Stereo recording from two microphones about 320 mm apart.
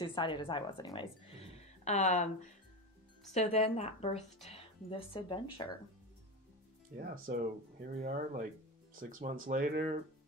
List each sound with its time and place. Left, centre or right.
0.0 s a woman's voice: centre
3.3 s a woman's voice: left
7.0 s speech: right